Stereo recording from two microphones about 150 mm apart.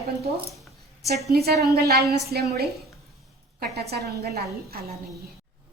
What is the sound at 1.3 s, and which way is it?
A woman's voice, 90° right.